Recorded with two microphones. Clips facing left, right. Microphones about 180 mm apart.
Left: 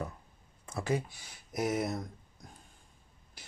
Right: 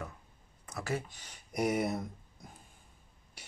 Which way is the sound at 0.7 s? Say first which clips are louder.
Left 4 dB; 25° left (ahead or behind).